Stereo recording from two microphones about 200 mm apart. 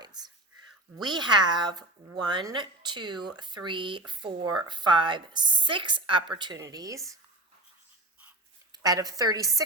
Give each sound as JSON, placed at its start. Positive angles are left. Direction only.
{"t": 0.0, "sound": "a sound", "side_deg": -20}
{"t": 0.9, "sound": "speech", "side_deg": -20}
{"t": 8.7, "sound": "a woman's voice", "side_deg": -20}